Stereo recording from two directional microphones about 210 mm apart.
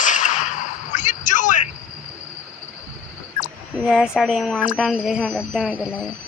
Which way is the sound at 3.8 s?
Centre (ahead or behind).